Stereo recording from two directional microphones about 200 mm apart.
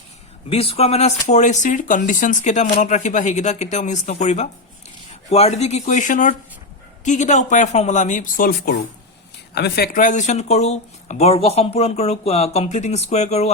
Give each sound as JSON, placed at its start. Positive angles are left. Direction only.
{"t": 0.5, "sound": "speech", "side_deg": 30}